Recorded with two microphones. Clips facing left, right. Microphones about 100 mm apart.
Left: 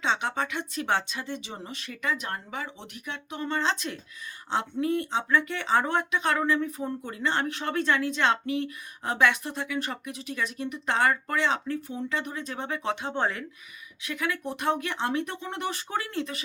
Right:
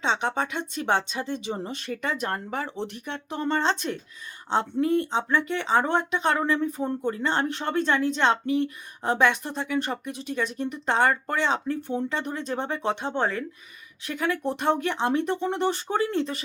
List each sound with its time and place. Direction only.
0.0 s speech: 30° right (ahead or behind)